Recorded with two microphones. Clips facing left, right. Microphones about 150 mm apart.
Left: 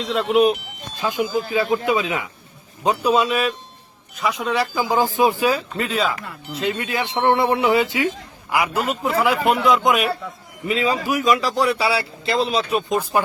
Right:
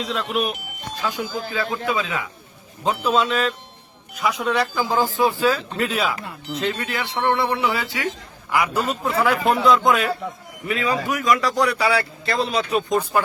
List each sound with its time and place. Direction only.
0.3 s speech: 30° left (ahead or behind)
1.0 s speech: 15° left (ahead or behind)
4.2 s speech: centre (ahead or behind); by 5.6 s 15° left (ahead or behind)
5.7 s speech: centre (ahead or behind)
6.7 s speech: 20° left (ahead or behind)